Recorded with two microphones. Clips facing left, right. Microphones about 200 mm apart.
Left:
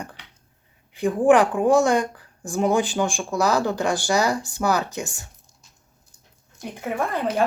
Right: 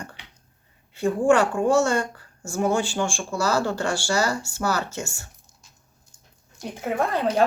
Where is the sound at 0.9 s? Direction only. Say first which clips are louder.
Left 2 dB; 15° left (ahead or behind).